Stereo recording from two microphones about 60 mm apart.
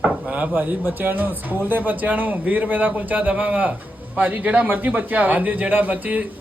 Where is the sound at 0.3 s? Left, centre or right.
Right.